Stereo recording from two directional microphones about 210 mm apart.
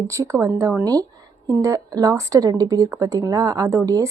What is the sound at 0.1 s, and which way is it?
A woman's voice, 15° right (ahead or behind).